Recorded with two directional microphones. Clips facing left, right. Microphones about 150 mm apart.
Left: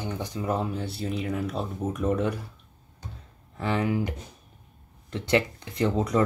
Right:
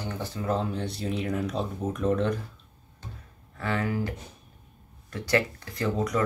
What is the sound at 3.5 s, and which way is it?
Speech, 20° left (ahead or behind).